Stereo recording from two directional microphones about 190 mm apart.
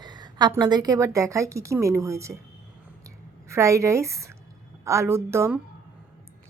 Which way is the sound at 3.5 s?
15° right (ahead or behind).